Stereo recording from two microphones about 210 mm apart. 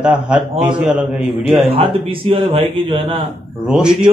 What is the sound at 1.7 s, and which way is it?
A man's voice, 25° right (ahead or behind).